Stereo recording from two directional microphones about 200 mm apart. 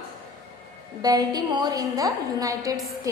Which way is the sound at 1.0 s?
20° right (ahead or behind).